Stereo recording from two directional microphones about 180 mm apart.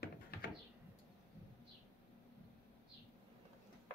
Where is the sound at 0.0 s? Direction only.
55° left (ahead or behind).